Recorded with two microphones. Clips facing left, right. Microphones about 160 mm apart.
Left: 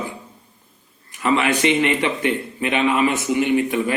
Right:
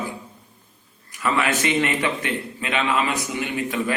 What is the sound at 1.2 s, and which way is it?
A man's voice, 20° left (ahead or behind).